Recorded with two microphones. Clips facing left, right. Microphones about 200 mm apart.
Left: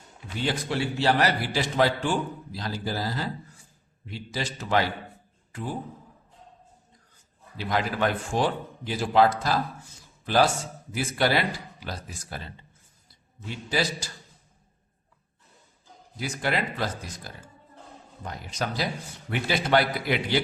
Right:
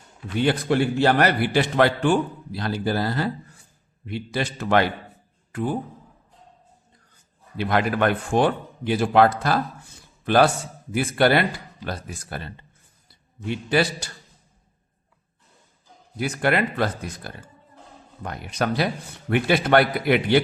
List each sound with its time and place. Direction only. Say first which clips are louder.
0.3 s a man's voice: right 7 dB; 55° right (ahead or behind)
5.5 s a sound: right 8 dB; 60° right (ahead or behind)
7.5 s a man's voice: right 5 dB; 60° right (ahead or behind)
13.5 s a man's voice: right 6 dB; 60° right (ahead or behind)
16.1 s a man's voice: right 6 dB; 60° right (ahead or behind)